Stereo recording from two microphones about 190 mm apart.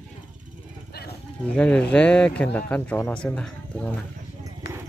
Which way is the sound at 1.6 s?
5° left (ahead or behind).